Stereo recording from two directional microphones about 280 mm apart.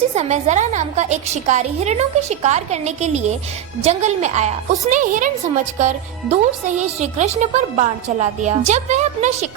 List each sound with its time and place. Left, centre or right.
0.1 s a woman's voice: right